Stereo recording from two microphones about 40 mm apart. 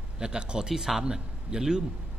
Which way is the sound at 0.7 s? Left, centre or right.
Centre.